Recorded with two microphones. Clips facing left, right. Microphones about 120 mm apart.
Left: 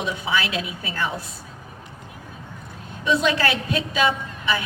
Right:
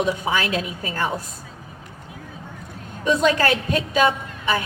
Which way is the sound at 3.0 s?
45° right (ahead or behind).